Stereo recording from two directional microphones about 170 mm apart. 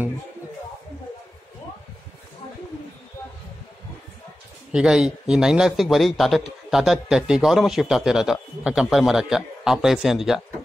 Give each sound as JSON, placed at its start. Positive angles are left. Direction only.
{"t": 4.7, "sound": "a man's voice", "side_deg": -5}